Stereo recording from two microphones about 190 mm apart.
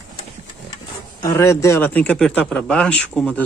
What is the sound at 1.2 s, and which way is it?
A man's voice, 15° left (ahead or behind).